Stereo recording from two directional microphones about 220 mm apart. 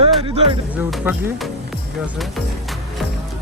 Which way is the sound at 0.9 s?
5° right (ahead or behind).